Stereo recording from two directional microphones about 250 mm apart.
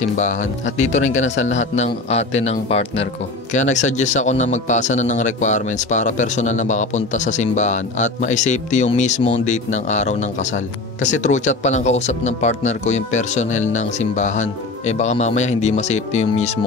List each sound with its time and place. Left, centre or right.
0.2 s speech: left